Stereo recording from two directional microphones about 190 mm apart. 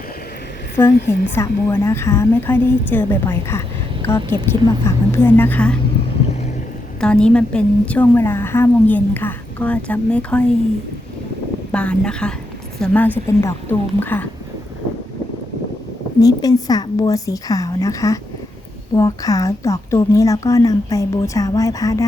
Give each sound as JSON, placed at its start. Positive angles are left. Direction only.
{"t": 1.0, "sound": "a woman's voice", "side_deg": 10}
{"t": 7.0, "sound": "a woman's voice", "side_deg": 5}
{"t": 11.7, "sound": "a woman's voice", "side_deg": 5}
{"t": 16.2, "sound": "a woman's voice", "side_deg": 20}